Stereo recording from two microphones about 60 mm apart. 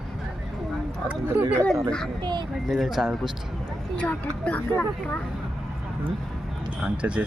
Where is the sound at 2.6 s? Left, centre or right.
Centre.